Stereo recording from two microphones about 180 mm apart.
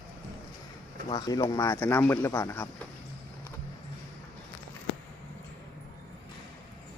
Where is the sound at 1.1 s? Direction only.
20° left (ahead or behind).